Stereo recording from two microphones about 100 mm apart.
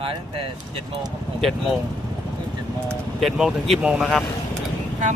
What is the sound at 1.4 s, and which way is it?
Speech, centre (ahead or behind).